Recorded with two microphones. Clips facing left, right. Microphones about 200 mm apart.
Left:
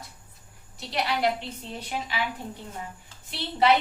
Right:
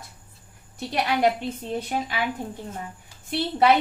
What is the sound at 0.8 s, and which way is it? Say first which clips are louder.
A woman's voice: right 4 dB; 50° right (ahead or behind).